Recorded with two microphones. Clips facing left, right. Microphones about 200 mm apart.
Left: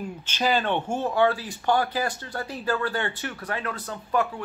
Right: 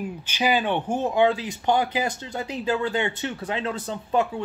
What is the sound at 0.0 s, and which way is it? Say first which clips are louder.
Speech: right 1 dB; 10° right (ahead or behind).